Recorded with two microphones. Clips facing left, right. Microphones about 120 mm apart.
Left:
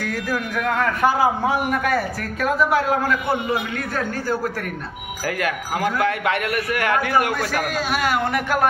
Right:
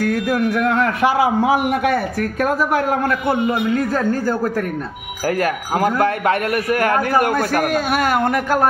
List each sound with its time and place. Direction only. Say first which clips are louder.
0.0 s a man's voice: right 7 dB; 60° right (ahead or behind)
3.7 s a man's voice: right 7 dB; 40° right (ahead or behind)